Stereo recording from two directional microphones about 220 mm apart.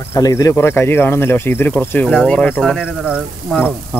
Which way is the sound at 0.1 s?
15° left (ahead or behind).